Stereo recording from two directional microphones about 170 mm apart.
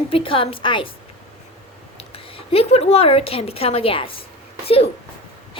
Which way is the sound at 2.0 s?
35° left (ahead or behind).